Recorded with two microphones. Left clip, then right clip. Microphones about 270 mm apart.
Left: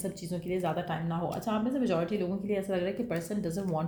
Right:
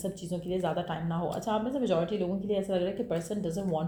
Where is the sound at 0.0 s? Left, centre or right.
Left.